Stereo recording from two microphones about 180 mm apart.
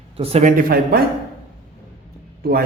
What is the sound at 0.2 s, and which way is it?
Speech, 35° right (ahead or behind).